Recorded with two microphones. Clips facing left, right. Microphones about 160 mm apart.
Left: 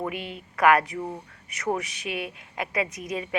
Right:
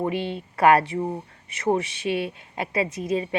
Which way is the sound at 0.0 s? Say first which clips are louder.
Right 6 dB; 30° right (ahead or behind).